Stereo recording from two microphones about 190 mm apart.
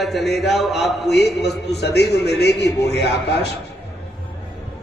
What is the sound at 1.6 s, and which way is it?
A man's voice, 60° left (ahead or behind).